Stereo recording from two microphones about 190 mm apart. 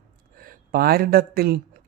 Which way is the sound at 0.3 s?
50° right (ahead or behind).